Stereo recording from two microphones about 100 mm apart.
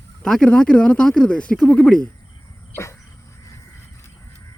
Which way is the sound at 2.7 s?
30° left (ahead or behind).